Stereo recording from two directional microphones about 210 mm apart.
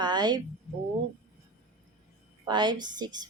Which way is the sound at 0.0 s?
20° right (ahead or behind).